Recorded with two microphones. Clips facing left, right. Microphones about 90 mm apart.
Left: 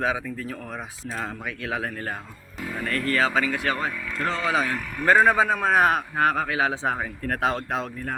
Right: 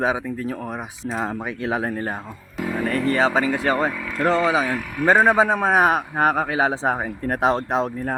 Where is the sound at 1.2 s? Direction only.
30° right (ahead or behind).